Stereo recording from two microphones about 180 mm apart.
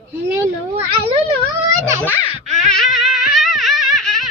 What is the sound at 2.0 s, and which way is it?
Speech, 10° left (ahead or behind).